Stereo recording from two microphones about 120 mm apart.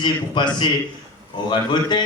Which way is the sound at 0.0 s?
40° left (ahead or behind).